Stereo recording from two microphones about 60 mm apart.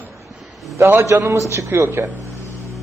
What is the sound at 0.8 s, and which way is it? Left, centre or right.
A man's voice, right.